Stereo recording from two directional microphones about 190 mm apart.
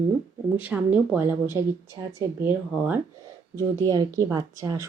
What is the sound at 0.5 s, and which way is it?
Speech, 10° right (ahead or behind).